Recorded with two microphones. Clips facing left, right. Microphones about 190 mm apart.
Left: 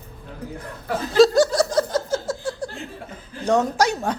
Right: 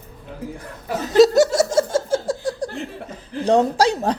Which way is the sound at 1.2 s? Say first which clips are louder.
Right 2 dB; 25° right (ahead or behind).